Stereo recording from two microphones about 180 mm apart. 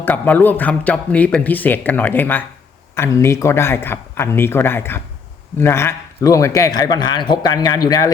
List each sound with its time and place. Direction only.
0.0 s speech: 10° left (ahead or behind)